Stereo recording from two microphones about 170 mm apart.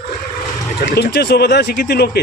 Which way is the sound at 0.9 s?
75° left (ahead or behind).